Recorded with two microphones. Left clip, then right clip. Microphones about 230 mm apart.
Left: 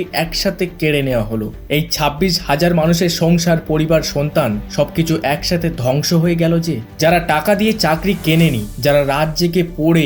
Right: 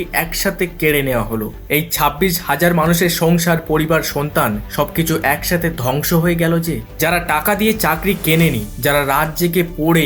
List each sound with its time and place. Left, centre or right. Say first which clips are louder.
0.1 s speech: right 1 dB; left